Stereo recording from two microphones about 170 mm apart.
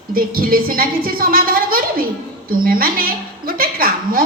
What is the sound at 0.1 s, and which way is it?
A woman's voice, 60° right (ahead or behind).